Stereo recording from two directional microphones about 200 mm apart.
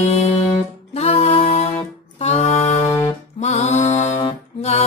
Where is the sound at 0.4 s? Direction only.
30° left (ahead or behind).